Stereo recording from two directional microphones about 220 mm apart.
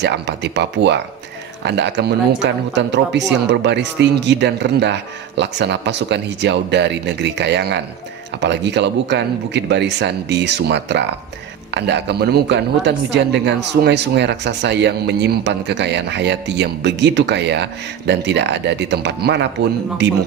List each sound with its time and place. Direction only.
0.0 s speech: 50° right (ahead or behind)